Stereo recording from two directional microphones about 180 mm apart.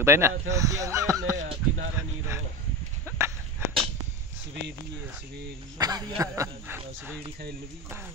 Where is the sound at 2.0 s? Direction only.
15° right (ahead or behind).